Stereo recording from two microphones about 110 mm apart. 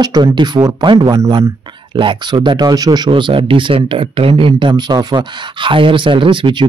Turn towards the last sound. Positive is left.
turn(degrees=-50)  # may be behind; listen again after turning